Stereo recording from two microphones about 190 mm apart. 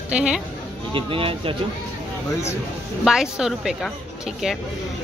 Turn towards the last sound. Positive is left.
turn(degrees=-5)  # may be behind; listen again after turning